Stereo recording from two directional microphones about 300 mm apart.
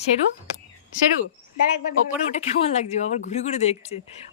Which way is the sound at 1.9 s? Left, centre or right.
Left.